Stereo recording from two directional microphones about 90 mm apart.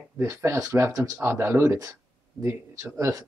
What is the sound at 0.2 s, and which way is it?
Speech, 30° right (ahead or behind).